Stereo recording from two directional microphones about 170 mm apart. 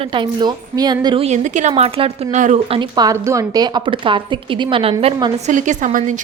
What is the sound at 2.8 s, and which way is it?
A woman's voice, 25° right (ahead or behind).